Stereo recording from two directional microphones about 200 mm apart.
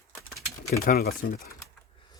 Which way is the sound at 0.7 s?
50° left (ahead or behind).